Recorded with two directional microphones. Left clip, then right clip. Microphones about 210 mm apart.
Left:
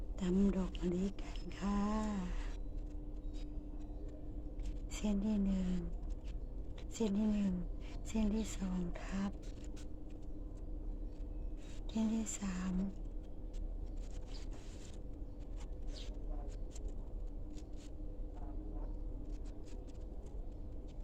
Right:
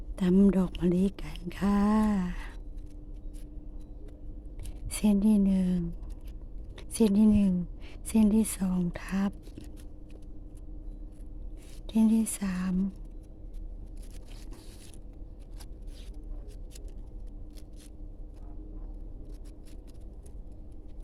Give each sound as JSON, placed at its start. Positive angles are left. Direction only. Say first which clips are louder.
{"t": 0.2, "sound": "speech", "louder": "right 11 dB", "side_deg": -55}
{"t": 4.9, "sound": "speech", "louder": "right 12 dB", "side_deg": -55}
{"t": 6.7, "sound": "a woman's voice", "louder": "right 12 dB", "side_deg": -55}
{"t": 11.9, "sound": "speech", "louder": "right 12 dB", "side_deg": -55}